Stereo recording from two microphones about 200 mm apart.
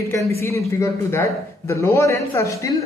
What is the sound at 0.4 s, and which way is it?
A man's voice, 15° left (ahead or behind).